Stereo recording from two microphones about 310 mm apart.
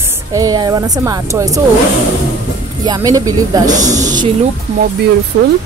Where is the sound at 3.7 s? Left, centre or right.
Right.